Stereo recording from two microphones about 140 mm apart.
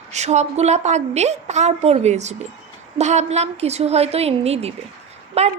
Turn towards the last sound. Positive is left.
turn(degrees=-50)  # may be behind; listen again after turning